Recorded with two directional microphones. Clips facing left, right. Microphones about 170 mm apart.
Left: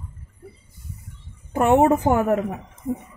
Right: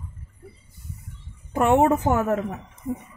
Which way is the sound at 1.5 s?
5° left (ahead or behind).